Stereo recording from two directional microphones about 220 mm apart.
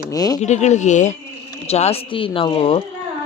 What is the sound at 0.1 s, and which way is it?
Speech, 15° left (ahead or behind).